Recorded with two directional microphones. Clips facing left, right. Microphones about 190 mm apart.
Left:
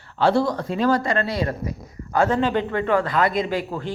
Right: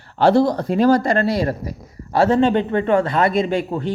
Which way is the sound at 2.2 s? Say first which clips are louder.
Right 6 dB; 25° right (ahead or behind).